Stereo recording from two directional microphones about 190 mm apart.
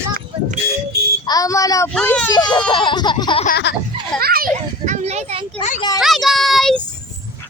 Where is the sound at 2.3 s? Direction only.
20° left (ahead or behind).